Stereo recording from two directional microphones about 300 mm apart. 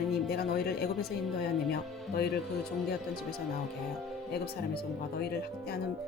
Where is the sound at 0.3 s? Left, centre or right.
Left.